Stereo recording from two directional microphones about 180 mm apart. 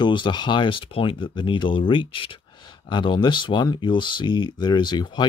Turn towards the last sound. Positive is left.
turn(degrees=25)  # may be behind; listen again after turning